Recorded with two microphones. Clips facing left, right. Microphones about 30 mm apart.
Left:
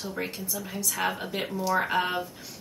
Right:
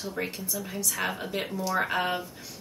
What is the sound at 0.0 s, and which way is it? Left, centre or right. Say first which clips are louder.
Speech: even; centre.